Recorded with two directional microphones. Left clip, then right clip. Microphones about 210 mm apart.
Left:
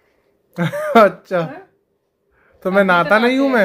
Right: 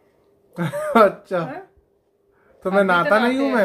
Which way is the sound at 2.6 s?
35° left (ahead or behind).